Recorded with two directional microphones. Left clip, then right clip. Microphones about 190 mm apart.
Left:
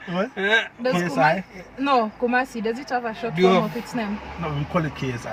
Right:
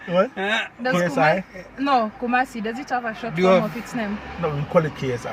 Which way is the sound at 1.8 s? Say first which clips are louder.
Even; centre (ahead or behind).